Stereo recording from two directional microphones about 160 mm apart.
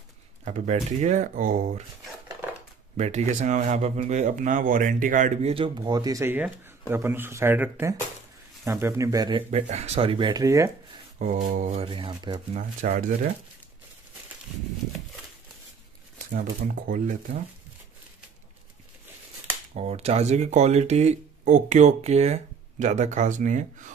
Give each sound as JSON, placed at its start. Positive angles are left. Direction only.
{"t": 0.5, "sound": "speech", "side_deg": -45}
{"t": 3.0, "sound": "speech", "side_deg": -45}
{"t": 5.5, "sound": "speech", "side_deg": -30}
{"t": 9.5, "sound": "speech", "side_deg": -40}
{"t": 10.4, "sound": "speech", "side_deg": -20}
{"t": 11.1, "sound": "speech", "side_deg": -50}
{"t": 11.8, "sound": "speech", "side_deg": -30}
{"t": 12.5, "sound": "speech", "side_deg": -55}
{"t": 16.3, "sound": "speech", "side_deg": -60}
{"t": 19.7, "sound": "speech", "side_deg": -40}